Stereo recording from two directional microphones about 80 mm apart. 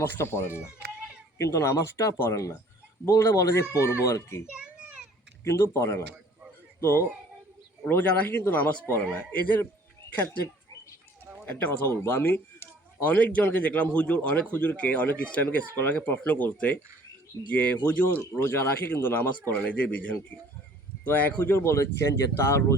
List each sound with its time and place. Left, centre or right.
0.0 s speech: left
4.4 s children playing: centre
5.4 s speech: left
7.9 s speech: left
11.4 s speech: left
18.3 s speech: left